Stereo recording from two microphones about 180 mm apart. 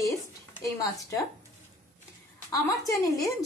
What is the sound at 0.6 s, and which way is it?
Speech, 20° left (ahead or behind).